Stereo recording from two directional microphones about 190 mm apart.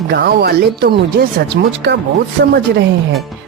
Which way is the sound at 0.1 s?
60° right (ahead or behind).